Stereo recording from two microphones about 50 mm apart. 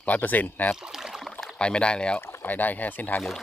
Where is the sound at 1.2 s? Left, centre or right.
Centre.